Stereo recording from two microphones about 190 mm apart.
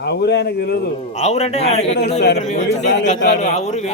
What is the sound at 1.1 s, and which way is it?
A man's voice, 35° left (ahead or behind).